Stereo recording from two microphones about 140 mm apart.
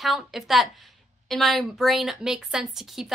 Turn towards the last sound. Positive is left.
turn(degrees=0)  # may be behind; listen again after turning